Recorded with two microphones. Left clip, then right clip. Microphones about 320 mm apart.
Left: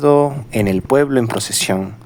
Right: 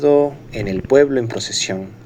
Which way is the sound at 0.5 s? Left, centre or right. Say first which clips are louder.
Left 6 dB; left.